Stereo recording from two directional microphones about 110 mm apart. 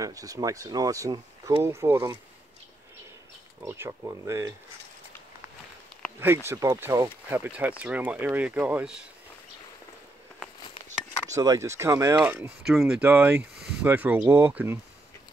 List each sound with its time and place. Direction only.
0.0 s speech: 30° right (ahead or behind)
3.6 s speech: 20° right (ahead or behind)
6.1 s speech: 20° right (ahead or behind)
11.2 s speech: 30° right (ahead or behind)
12.6 s speech: 5° right (ahead or behind)
13.0 s speech: 15° right (ahead or behind)